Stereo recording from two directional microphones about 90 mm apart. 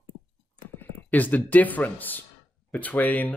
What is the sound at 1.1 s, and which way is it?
Speech, 20° left (ahead or behind).